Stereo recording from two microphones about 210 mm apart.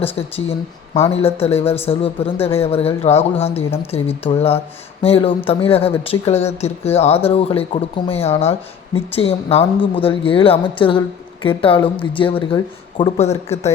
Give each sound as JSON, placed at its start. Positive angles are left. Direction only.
{"t": 0.2, "sound": "speech", "side_deg": 25}